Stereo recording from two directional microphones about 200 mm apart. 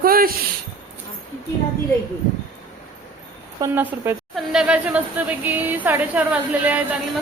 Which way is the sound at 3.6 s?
15° right (ahead or behind).